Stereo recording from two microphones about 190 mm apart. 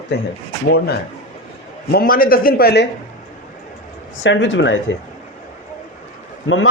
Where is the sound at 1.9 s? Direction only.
50° left (ahead or behind).